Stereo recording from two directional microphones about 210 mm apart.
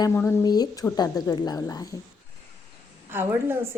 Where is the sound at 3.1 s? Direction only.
10° right (ahead or behind).